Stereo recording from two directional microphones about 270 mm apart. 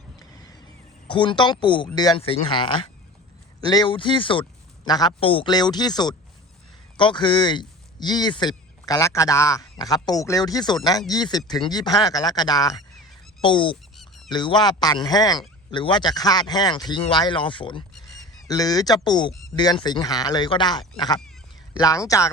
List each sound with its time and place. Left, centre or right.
0.2 s a sound: centre
1.0 s speech: centre
13.9 s fowl: centre
14.3 s speech: centre